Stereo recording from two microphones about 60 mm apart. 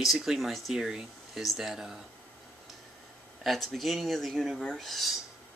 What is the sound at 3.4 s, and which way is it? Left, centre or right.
Speech, centre.